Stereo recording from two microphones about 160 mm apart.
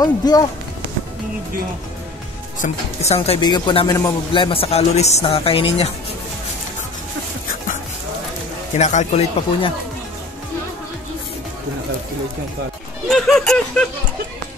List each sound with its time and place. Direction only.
0.0 s speech: 25° left (ahead or behind)
2.6 s speech: 45° left (ahead or behind)
3.3 s a man's voice: 30° left (ahead or behind)
8.7 s speech: 50° left (ahead or behind)
13.1 s a sound: centre (ahead or behind)